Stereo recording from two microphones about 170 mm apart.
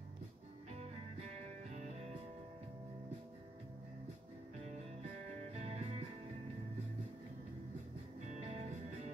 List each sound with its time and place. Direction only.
1.7 s music: 40° right (ahead or behind)
5.5 s music: 40° right (ahead or behind)
8.3 s music: 40° right (ahead or behind)